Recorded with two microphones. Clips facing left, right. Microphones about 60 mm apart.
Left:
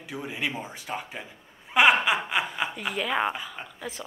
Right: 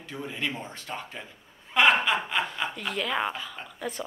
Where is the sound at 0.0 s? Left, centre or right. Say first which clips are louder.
Left 1 dB; centre.